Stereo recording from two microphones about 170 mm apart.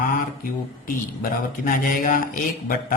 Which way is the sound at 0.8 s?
55° left (ahead or behind).